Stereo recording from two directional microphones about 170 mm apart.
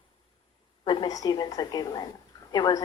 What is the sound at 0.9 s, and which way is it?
Speech, 20° left (ahead or behind).